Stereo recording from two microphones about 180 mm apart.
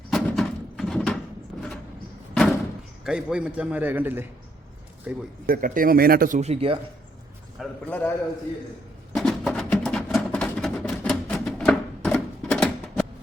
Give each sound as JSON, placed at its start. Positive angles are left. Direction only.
{"t": 0.1, "sound": "a sound", "side_deg": 0}
{"t": 1.5, "sound": "vehicle", "side_deg": 0}
{"t": 2.3, "sound": "door", "side_deg": 0}
{"t": 3.0, "sound": "a man's voice", "side_deg": -5}
{"t": 5.5, "sound": "speech", "side_deg": -50}
{"t": 7.6, "sound": "a man's voice", "side_deg": 10}
{"t": 9.1, "sound": "music", "side_deg": 0}